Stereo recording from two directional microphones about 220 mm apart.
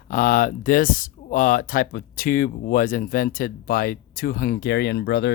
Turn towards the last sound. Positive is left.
turn(degrees=50)  # may be behind; listen again after turning